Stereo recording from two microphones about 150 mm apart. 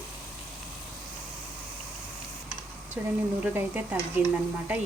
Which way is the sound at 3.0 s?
15° right (ahead or behind).